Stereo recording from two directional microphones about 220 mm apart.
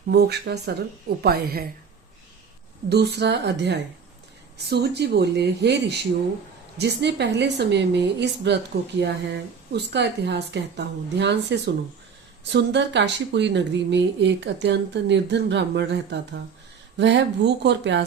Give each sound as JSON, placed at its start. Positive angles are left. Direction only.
{"t": 0.1, "sound": "speech", "side_deg": -50}
{"t": 2.9, "sound": "speech", "side_deg": -50}